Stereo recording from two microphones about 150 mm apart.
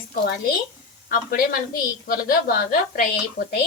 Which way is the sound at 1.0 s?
90° left.